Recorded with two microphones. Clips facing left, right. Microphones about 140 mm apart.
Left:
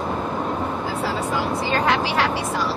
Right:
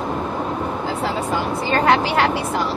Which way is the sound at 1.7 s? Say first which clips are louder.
Right 6 dB; 55° right (ahead or behind).